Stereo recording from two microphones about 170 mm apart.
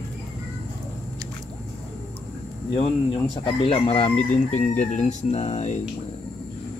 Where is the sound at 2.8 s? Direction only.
35° left (ahead or behind).